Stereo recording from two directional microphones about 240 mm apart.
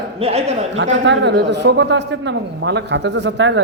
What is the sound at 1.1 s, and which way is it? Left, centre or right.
A man's voice, right.